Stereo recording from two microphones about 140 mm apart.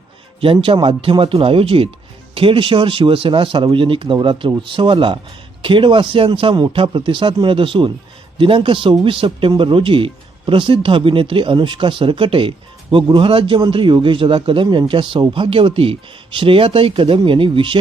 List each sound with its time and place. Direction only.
0.3 s speech: 40° right (ahead or behind)